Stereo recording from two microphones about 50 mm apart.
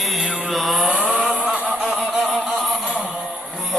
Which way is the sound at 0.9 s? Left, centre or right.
Right.